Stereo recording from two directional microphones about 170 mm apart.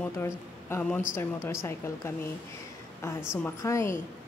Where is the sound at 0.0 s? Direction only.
15° left (ahead or behind).